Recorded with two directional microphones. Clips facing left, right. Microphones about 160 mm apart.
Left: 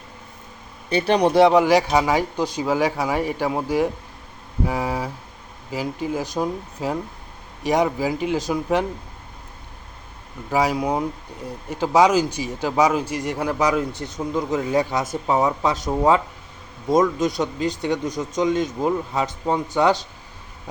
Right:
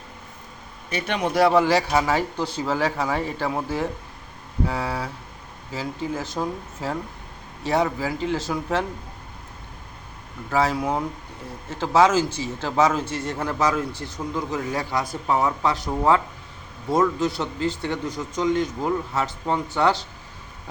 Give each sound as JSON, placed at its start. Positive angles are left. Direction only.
{"t": 0.9, "sound": "speech", "side_deg": 30}
{"t": 1.4, "sound": "a man's voice", "side_deg": 15}
{"t": 10.5, "sound": "a man's voice", "side_deg": 15}